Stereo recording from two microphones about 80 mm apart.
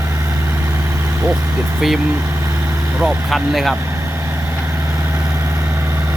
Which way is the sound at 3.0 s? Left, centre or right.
Centre.